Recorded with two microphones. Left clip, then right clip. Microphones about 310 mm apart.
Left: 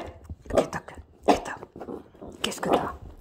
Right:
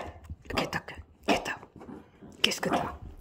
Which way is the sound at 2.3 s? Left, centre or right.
Centre.